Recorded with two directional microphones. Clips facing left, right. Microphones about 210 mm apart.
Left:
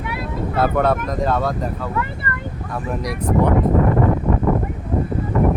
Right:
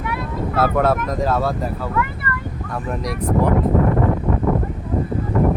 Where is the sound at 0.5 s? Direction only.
5° right (ahead or behind).